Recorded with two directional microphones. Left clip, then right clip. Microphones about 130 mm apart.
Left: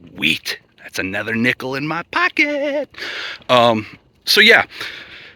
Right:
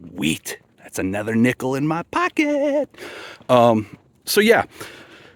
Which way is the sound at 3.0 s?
40° right (ahead or behind).